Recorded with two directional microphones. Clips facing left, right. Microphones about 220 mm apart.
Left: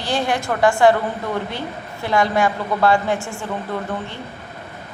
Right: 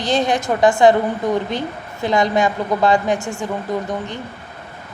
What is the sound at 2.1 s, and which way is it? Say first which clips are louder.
A woman's voice: right 2 dB; 20° right (ahead or behind).